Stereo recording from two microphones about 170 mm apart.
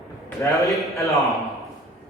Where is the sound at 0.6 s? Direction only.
Centre (ahead or behind).